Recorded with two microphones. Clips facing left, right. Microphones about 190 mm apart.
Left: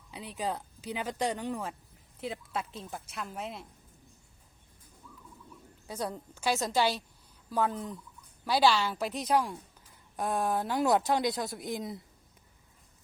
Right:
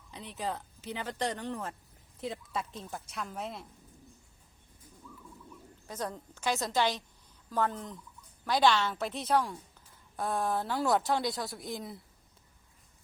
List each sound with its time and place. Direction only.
0.1 s a woman's voice: 10° left (ahead or behind)
5.9 s speech: 10° left (ahead or behind)